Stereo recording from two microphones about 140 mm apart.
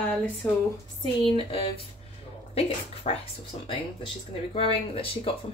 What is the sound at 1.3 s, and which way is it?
Speech, 40° left (ahead or behind).